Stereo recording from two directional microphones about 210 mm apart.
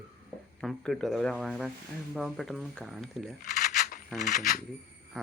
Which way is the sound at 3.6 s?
45° left (ahead or behind).